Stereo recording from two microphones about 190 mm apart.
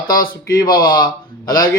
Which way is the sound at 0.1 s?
20° left (ahead or behind).